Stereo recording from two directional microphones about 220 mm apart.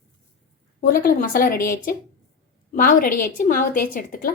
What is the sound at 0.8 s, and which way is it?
A woman's voice, 40° left (ahead or behind).